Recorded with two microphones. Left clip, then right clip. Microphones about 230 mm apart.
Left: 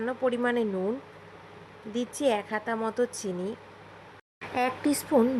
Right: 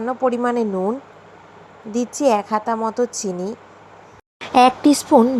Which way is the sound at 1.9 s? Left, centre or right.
Centre.